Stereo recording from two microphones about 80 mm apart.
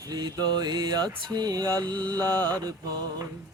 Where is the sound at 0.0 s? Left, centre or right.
Right.